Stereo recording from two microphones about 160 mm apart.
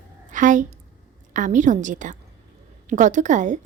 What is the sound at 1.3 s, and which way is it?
A woman's voice, 55° right (ahead or behind).